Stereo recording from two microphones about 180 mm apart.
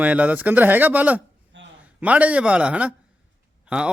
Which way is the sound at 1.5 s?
90° right.